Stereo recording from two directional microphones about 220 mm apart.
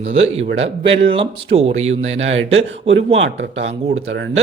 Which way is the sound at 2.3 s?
60° right (ahead or behind).